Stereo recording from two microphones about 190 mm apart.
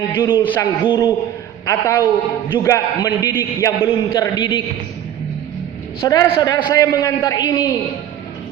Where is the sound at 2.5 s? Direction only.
20° left (ahead or behind).